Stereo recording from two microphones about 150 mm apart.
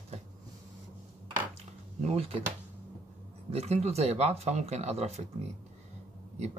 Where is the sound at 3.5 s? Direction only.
45° right (ahead or behind).